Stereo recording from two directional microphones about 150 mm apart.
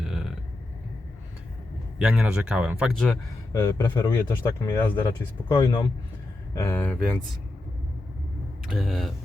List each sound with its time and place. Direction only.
0.0 s a sound: 5° right (ahead or behind)
2.0 s speech: 5° right (ahead or behind)
3.5 s speech: 30° left (ahead or behind); by 7.2 s 5° left (ahead or behind)
8.6 s speech: centre (ahead or behind)